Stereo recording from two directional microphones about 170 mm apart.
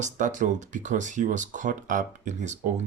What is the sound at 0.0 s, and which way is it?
Speech, 45° right (ahead or behind).